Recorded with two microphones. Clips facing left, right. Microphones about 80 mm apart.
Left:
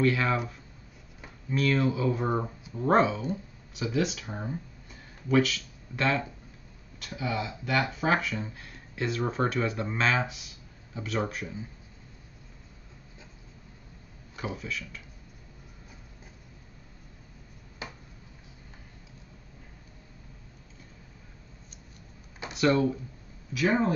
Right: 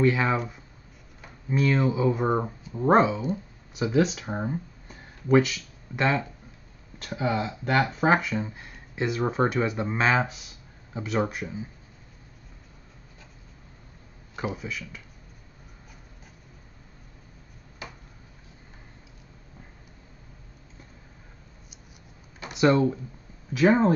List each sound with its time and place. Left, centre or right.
0.0 s speech: centre
1.5 s speech: centre
5.4 s speech: centre
7.0 s speech: right; by 11.6 s centre
14.3 s speech: right
22.5 s speech: right
23.5 s speech: right